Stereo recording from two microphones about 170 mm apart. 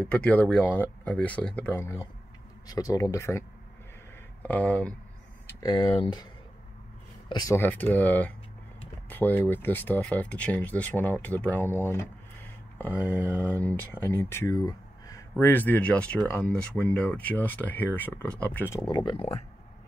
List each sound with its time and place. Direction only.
0.0 s speech: 5° left (ahead or behind)
5.5 s speech: 25° left (ahead or behind)
7.2 s speech: 20° left (ahead or behind)
13.1 s speech: 10° left (ahead or behind); by 19.4 s 35° left (ahead or behind)